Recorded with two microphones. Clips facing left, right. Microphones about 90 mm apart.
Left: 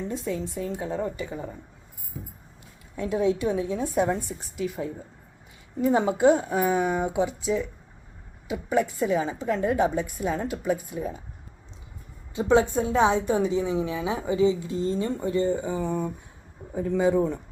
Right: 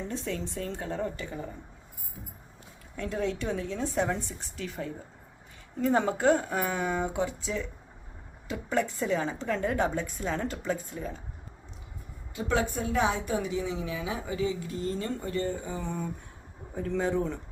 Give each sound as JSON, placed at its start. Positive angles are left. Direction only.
{"t": 0.1, "sound": "a woman's voice", "side_deg": 5}
{"t": 2.9, "sound": "a woman's voice", "side_deg": 15}
{"t": 12.3, "sound": "a woman's voice", "side_deg": 25}